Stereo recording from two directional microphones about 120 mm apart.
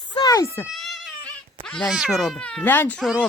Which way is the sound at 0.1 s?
35° left (ahead or behind).